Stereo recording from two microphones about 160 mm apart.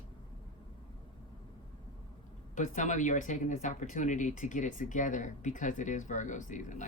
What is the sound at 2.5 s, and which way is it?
Speech, 50° left (ahead or behind).